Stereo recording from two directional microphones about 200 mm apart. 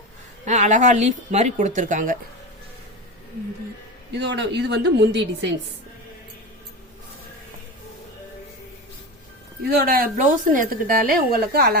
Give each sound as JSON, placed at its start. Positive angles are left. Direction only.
{"t": 0.4, "sound": "speech", "side_deg": -35}
{"t": 4.1, "sound": "speech", "side_deg": -60}
{"t": 9.6, "sound": "a woman's voice", "side_deg": -50}